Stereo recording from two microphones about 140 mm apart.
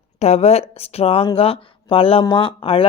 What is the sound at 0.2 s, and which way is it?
Speech, 50° left (ahead or behind).